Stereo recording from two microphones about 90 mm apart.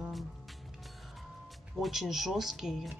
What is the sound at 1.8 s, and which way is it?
Speech, 5° right (ahead or behind).